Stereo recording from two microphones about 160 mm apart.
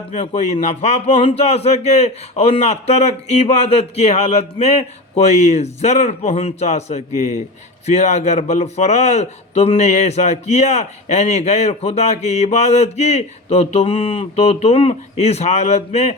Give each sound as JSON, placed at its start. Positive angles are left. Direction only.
{"t": 0.1, "sound": "a man's voice", "side_deg": 45}